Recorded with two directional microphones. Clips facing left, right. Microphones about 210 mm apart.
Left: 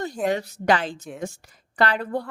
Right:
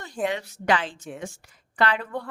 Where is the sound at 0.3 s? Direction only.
40° left (ahead or behind).